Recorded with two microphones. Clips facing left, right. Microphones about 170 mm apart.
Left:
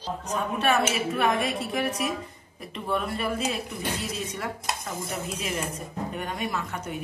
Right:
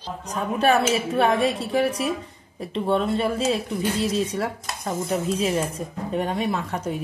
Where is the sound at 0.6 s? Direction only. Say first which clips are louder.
Right 5 dB; 35° right (ahead or behind).